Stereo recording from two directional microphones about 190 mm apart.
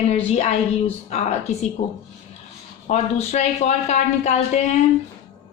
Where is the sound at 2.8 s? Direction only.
35° left (ahead or behind).